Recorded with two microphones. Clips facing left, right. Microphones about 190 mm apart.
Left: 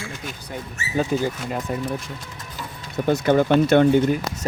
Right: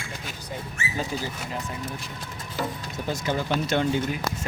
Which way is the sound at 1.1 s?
60° left (ahead or behind).